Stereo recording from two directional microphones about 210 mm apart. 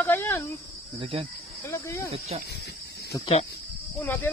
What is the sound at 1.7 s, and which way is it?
Speech, 15° left (ahead or behind).